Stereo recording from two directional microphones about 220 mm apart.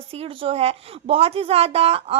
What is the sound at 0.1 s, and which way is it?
A woman's voice, 25° right (ahead or behind).